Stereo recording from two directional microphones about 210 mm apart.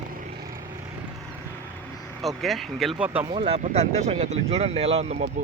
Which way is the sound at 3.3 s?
25° right (ahead or behind).